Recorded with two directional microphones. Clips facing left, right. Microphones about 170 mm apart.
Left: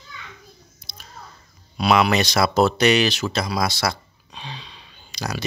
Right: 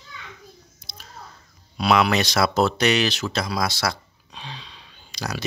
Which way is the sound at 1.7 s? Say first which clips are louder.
Left 1 dB; centre (ahead or behind).